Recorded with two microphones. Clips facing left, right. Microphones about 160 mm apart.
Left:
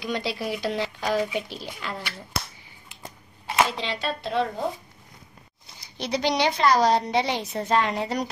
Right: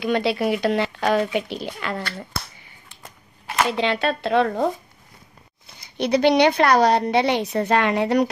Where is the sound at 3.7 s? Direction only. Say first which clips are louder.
Right 8 dB; 60° right (ahead or behind).